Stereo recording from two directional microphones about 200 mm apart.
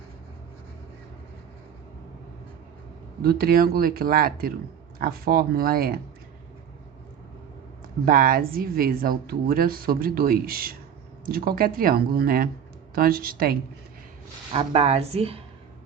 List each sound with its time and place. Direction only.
3.2 s speech: 50° right (ahead or behind)
8.0 s speech: 45° right (ahead or behind)
14.5 s a woman's voice: 30° right (ahead or behind)